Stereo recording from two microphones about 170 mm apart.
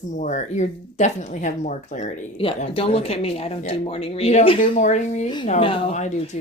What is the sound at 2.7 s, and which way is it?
Speech, 35° left (ahead or behind).